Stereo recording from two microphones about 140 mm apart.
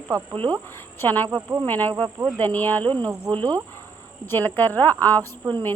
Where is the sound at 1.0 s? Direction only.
15° left (ahead or behind).